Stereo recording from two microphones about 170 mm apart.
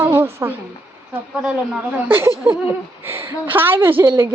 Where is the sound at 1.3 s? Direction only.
5° right (ahead or behind).